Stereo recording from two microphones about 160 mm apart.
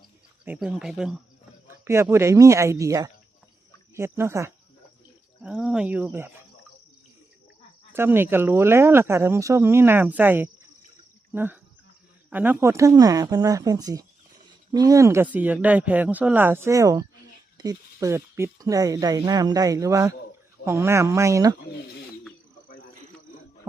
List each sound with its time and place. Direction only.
0.4 s speech: 5° right (ahead or behind)
1.8 s speech: 15° right (ahead or behind)
5.4 s speech: 5° right (ahead or behind)
7.9 s speech: 15° right (ahead or behind)